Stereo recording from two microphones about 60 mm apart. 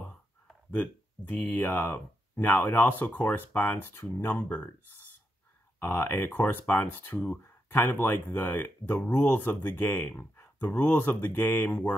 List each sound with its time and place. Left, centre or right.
1.3 s speech: left
5.8 s speech: left